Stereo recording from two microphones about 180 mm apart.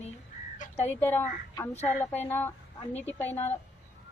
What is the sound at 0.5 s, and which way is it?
Crow, 35° left (ahead or behind).